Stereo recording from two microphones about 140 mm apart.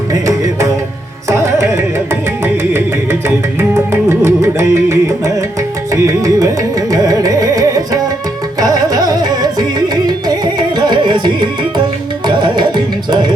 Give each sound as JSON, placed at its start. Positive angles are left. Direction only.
{"t": 0.1, "sound": "music", "side_deg": -25}